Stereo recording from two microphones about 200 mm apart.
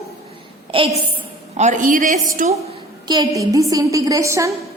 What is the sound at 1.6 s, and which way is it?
Speech, 40° right (ahead or behind).